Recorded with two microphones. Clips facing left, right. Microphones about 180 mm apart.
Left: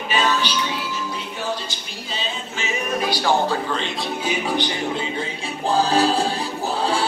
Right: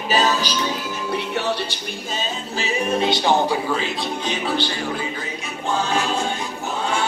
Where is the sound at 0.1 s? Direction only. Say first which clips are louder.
Right 2 dB; 40° right (ahead or behind).